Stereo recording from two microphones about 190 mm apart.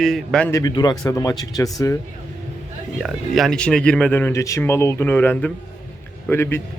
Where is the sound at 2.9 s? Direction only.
Centre (ahead or behind).